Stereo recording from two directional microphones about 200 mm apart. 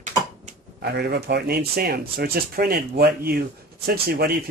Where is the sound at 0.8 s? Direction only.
55° right (ahead or behind).